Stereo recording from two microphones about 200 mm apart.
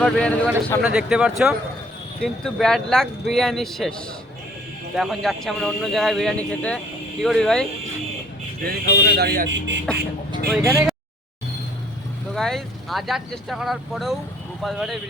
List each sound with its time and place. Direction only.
0.0 s speech: 5° left (ahead or behind)
8.6 s speech: 55° right (ahead or behind)
10.5 s speech: 15° right (ahead or behind)
12.3 s speech: centre (ahead or behind)